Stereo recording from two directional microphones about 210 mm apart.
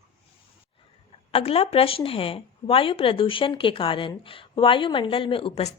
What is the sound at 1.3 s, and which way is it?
A woman's voice, 30° left (ahead or behind).